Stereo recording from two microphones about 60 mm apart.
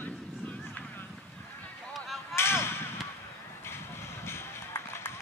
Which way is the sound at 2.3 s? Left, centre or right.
Left.